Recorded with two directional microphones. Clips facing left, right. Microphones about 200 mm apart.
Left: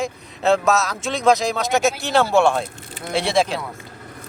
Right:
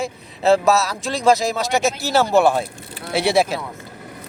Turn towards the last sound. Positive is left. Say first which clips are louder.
# right 2 dB
turn(degrees=-5)  # may be behind; listen again after turning